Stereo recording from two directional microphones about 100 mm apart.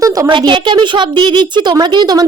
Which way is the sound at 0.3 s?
55° right (ahead or behind).